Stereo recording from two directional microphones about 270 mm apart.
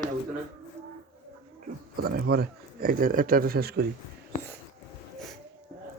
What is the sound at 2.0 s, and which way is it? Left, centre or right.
Speech, right.